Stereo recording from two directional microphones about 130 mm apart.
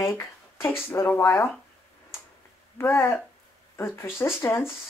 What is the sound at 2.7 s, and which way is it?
Speech, 25° left (ahead or behind).